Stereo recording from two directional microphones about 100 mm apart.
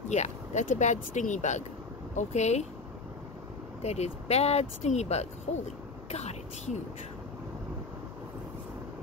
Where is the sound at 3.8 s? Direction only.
90° left.